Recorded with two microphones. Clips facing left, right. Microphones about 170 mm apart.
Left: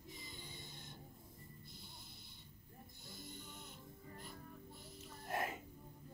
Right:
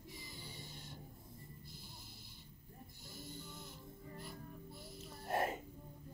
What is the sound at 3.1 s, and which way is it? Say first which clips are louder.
Music: right 3 dB; 15° left (ahead or behind).